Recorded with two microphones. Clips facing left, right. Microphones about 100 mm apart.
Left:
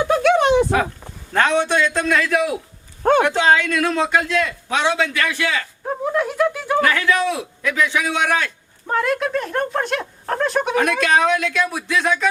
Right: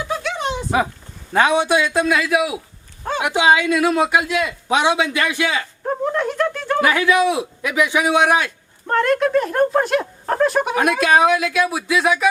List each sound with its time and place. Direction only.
0.0 s a sound: 60° left (ahead or behind)
1.3 s a man's voice: 10° right (ahead or behind)
3.0 s speech: 55° left (ahead or behind)
3.2 s a man's voice: 15° right (ahead or behind)
5.8 s speech: centre (ahead or behind)
6.8 s a man's voice: 15° right (ahead or behind)
8.9 s speech: centre (ahead or behind)